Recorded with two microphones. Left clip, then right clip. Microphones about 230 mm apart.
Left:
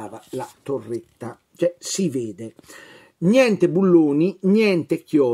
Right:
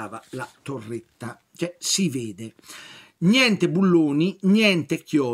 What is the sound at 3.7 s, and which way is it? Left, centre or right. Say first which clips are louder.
Speech: left 4 dB; right.